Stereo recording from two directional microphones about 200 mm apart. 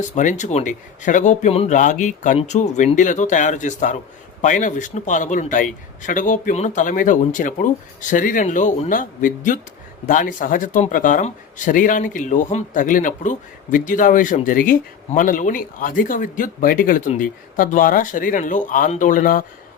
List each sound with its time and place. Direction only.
0.2 s speech: 40° left (ahead or behind)